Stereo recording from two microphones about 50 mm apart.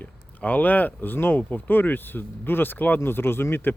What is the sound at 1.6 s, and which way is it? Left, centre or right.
Speech, left.